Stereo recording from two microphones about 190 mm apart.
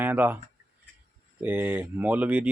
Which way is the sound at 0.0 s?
10° right (ahead or behind).